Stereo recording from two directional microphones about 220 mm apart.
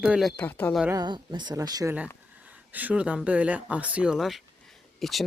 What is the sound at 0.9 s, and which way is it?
Speech, 20° right (ahead or behind).